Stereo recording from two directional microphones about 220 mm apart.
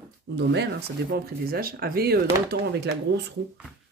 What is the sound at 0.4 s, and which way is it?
Speech, 50° right (ahead or behind).